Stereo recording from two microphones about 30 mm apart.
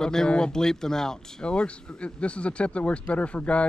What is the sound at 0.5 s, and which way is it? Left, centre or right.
Speech, centre.